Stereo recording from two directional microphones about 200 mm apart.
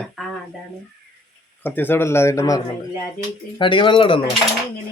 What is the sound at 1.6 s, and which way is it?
A man's voice, 10° left (ahead or behind).